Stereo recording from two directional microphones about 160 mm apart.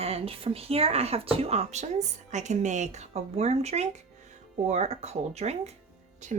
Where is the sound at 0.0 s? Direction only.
40° right (ahead or behind).